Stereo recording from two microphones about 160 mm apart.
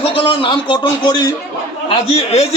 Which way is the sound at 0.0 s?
35° left (ahead or behind).